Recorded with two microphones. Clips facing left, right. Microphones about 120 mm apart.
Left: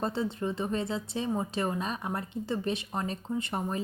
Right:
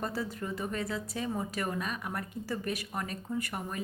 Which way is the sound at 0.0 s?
25° left (ahead or behind).